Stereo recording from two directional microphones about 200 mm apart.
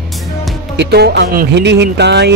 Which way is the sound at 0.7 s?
55° right (ahead or behind).